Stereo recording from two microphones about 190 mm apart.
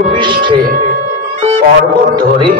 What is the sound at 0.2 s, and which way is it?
Music, 25° right (ahead or behind).